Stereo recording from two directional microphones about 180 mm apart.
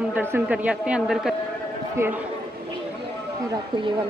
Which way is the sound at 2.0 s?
15° right (ahead or behind).